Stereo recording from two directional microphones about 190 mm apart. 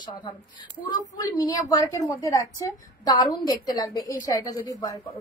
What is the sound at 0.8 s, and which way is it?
A woman's voice, 20° left (ahead or behind).